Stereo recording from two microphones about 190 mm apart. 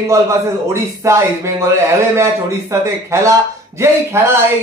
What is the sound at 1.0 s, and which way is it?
Speech, 15° right (ahead or behind).